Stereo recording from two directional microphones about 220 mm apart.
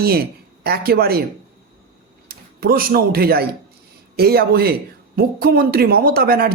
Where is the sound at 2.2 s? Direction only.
40° right (ahead or behind).